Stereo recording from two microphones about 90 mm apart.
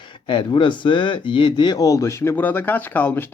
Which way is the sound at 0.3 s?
65° left (ahead or behind).